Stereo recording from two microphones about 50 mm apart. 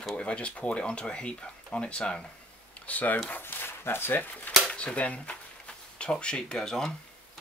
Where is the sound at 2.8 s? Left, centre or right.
Left.